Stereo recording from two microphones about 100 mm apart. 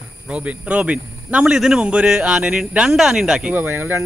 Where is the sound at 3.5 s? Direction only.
20° right (ahead or behind).